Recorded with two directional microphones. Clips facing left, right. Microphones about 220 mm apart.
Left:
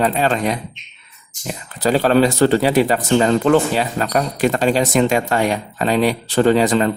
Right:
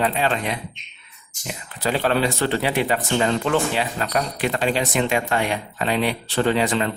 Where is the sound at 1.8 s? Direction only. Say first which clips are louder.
Left 7 dB; 40° left (ahead or behind).